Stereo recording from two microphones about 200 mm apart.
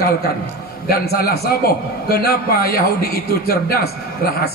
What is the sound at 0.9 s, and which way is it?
A man's voice, 50° left (ahead or behind).